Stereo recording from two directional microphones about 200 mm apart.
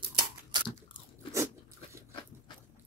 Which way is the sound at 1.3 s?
15° right (ahead or behind).